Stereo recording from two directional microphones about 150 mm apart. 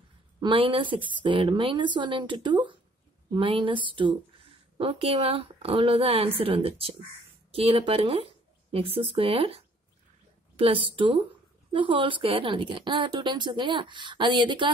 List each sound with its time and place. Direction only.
0.4 s speech: 35° right (ahead or behind)